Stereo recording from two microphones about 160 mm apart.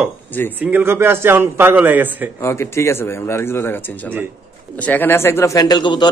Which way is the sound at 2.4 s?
15° left (ahead or behind).